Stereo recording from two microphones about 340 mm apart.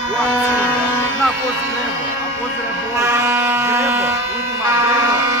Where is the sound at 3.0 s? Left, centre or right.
Centre.